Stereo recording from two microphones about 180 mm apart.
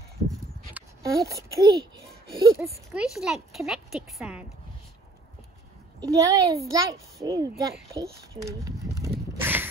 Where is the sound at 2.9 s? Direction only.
Centre (ahead or behind).